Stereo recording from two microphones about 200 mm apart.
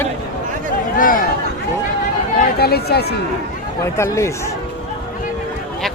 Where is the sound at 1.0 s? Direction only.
45° left (ahead or behind).